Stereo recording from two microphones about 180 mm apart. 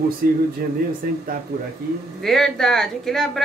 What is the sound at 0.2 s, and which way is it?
Speech, 55° right (ahead or behind).